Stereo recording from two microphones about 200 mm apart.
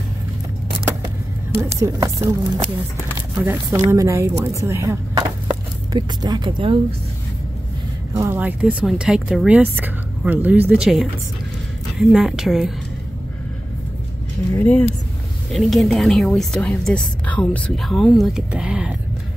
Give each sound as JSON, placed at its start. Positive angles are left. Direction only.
{"t": 1.6, "sound": "speech", "side_deg": -15}
{"t": 3.9, "sound": "speech", "side_deg": -15}
{"t": 8.1, "sound": "a woman's voice", "side_deg": -15}
{"t": 14.5, "sound": "a woman's voice", "side_deg": 10}